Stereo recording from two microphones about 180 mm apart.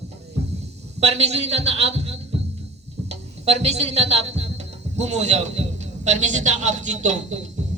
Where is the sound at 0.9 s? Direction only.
35° right (ahead or behind).